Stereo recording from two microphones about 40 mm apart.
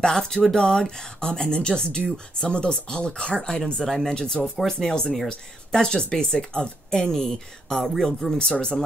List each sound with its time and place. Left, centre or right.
0.0 s speech: centre
3.8 s speech: centre
8.4 s speech: centre